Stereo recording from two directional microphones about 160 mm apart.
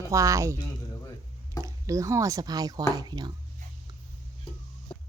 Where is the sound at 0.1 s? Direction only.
20° right (ahead or behind).